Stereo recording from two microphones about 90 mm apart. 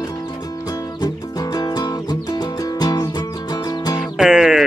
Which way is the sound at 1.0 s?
45° left (ahead or behind).